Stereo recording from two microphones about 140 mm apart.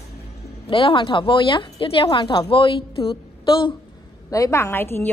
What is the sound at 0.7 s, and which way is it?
A woman's voice, 40° left (ahead or behind).